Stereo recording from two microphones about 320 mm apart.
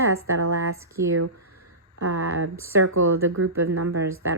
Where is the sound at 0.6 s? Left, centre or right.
Right.